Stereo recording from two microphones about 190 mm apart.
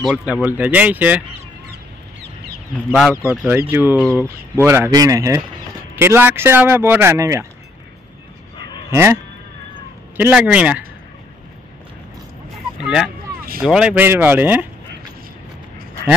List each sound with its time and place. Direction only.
0.1 s speech: 5° right (ahead or behind)
2.9 s speech: centre (ahead or behind)
3.3 s speech: 10° right (ahead or behind)
8.5 s dog: 25° left (ahead or behind)
8.9 s speech: 15° right (ahead or behind)
12.8 s speech: 5° right (ahead or behind)